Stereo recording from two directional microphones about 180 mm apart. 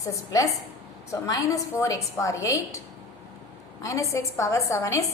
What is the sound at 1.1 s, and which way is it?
A woman's voice, 20° left (ahead or behind).